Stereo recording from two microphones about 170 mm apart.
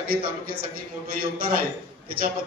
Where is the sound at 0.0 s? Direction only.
60° right (ahead or behind).